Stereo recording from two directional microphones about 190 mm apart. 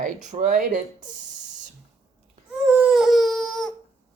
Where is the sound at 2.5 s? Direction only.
5° right (ahead or behind).